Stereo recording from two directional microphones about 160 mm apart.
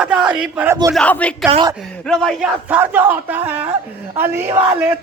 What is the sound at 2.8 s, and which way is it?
Speech, 10° right (ahead or behind).